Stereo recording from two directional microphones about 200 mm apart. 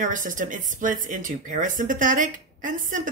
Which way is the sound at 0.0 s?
40° right (ahead or behind).